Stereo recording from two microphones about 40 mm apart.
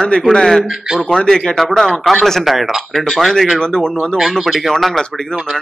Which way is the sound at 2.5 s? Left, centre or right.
Centre.